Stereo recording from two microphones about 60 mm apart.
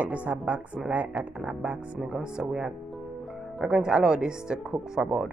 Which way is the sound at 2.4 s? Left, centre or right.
Centre.